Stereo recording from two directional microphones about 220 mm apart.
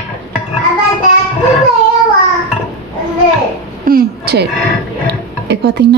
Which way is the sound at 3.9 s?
45° right (ahead or behind).